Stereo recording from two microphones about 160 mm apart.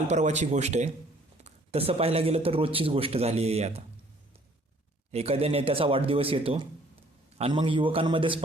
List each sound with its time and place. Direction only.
0.1 s speech: 45° right (ahead or behind)
5.1 s speech: 40° right (ahead or behind)